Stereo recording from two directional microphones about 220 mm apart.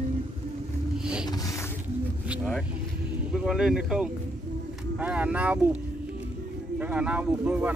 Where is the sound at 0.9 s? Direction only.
5° right (ahead or behind).